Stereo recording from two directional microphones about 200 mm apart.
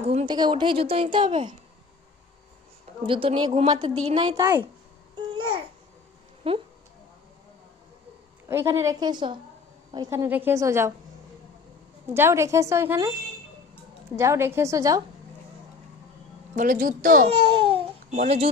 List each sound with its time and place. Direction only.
0.0 s a woman's voice: 30° right (ahead or behind)
3.1 s a woman's voice: 25° right (ahead or behind)
5.1 s babbling: 25° right (ahead or behind)
6.4 s a woman's voice: 30° right (ahead or behind)
8.5 s a woman's voice: 15° right (ahead or behind)
12.1 s a woman's voice: 10° right (ahead or behind)
14.1 s a woman's voice: 15° right (ahead or behind)
16.5 s speech: 45° right (ahead or behind)
17.5 s babbling: 25° right (ahead or behind)
18.1 s speech: 35° right (ahead or behind)